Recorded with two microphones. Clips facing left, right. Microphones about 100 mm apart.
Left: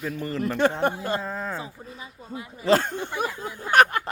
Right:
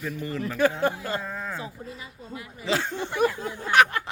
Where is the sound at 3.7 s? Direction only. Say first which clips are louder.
Left 2 dB; 45° left (ahead or behind).